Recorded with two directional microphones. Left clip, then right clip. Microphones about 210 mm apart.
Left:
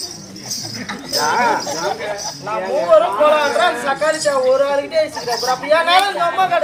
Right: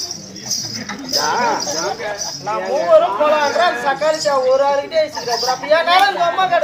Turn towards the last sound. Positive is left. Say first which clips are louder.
# right 1 dB
turn(degrees=10)  # may be behind; listen again after turning